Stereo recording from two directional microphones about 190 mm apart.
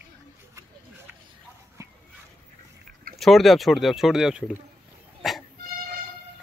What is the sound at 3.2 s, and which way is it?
Speech, centre (ahead or behind).